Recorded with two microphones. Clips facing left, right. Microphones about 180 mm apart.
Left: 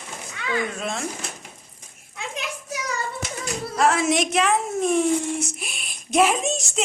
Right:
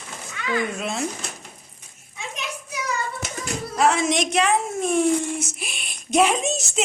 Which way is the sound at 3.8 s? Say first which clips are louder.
Even; centre (ahead or behind).